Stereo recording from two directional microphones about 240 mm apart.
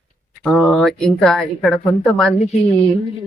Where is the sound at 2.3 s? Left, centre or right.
Left.